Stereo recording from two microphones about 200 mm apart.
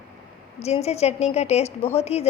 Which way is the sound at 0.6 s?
30° left (ahead or behind).